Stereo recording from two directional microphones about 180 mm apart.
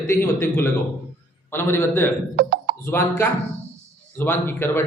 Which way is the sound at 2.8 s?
15° left (ahead or behind).